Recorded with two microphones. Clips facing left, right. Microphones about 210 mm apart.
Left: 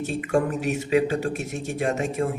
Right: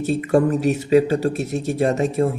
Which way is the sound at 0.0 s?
35° right (ahead or behind).